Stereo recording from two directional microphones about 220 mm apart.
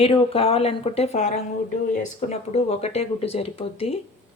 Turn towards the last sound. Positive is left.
turn(degrees=25)  # may be behind; listen again after turning